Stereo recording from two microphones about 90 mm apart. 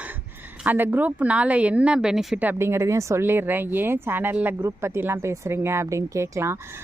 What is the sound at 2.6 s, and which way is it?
A woman's voice, 30° right (ahead or behind).